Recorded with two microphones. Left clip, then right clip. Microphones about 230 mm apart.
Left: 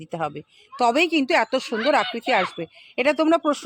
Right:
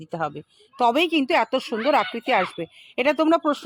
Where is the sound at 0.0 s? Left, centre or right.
Centre.